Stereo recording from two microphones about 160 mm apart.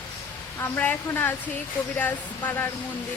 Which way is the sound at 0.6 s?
10° left (ahead or behind).